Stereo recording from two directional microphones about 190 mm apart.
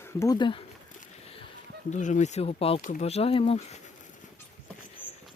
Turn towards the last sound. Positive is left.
turn(degrees=30)  # may be behind; listen again after turning